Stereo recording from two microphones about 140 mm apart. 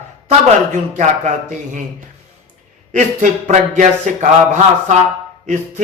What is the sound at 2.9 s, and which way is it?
Speech, 60° right (ahead or behind).